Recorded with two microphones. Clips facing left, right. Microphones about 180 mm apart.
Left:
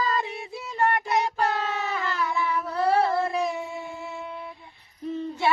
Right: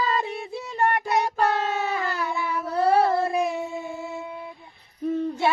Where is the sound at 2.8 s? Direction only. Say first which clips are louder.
Right 3 dB; 25° right (ahead or behind).